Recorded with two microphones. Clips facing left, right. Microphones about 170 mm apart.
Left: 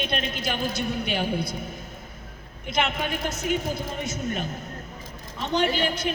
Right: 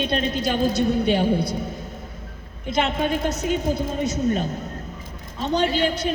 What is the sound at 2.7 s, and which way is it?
A woman's voice, 35° right (ahead or behind).